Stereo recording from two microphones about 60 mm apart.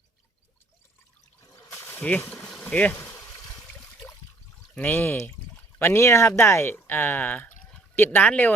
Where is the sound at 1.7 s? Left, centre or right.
Left.